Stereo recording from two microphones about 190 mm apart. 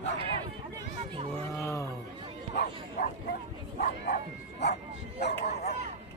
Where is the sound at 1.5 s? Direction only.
15° left (ahead or behind).